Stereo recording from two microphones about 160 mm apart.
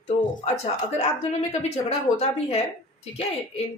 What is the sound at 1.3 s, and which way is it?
A woman's voice, 45° left (ahead or behind).